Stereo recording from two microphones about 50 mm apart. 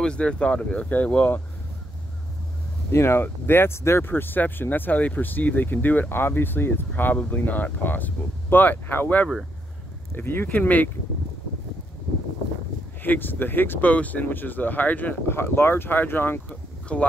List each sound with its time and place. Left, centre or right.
0.0 s speech: centre
0.8 s speech: left
2.9 s speech: left
4.0 s speech: left
7.3 s speech: left
10.1 s speech: left
13.0 s speech: left
15.2 s speech: left
16.9 s speech: left